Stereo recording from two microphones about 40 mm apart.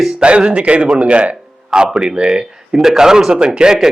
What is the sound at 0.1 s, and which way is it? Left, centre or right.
A man's voice, right.